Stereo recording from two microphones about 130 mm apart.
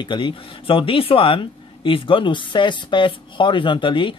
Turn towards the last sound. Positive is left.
turn(degrees=40)  # may be behind; listen again after turning